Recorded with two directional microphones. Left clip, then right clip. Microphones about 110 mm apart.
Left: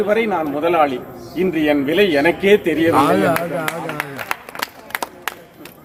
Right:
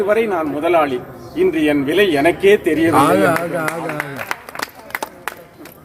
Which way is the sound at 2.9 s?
30° right (ahead or behind).